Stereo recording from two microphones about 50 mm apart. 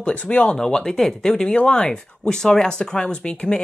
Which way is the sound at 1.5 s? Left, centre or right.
Left.